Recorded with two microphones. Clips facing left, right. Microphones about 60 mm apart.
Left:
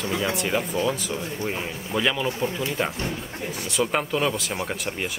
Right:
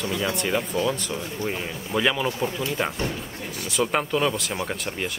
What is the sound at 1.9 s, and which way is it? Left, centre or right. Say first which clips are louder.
Speech: right 1 dB; centre.